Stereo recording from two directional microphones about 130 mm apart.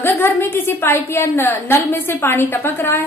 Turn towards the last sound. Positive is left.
turn(degrees=20)  # may be behind; listen again after turning